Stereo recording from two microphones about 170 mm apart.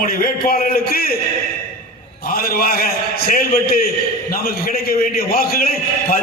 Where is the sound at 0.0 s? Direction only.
60° left (ahead or behind).